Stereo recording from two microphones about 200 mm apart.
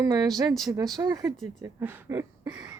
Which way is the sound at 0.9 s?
20° right (ahead or behind).